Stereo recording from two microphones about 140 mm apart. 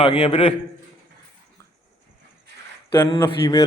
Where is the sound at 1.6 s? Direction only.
20° left (ahead or behind).